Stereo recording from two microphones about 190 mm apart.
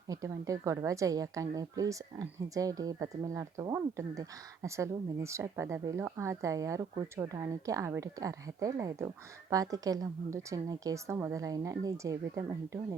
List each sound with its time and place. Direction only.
0.1 s a woman's voice: 15° right (ahead or behind)